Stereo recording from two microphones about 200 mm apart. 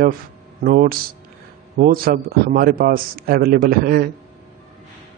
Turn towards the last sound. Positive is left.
turn(degrees=-50)  # may be behind; listen again after turning